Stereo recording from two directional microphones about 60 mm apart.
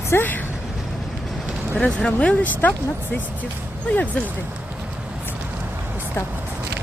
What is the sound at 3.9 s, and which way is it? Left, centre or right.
Speech, left.